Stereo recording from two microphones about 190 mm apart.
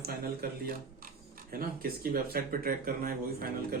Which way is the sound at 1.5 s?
50° right (ahead or behind).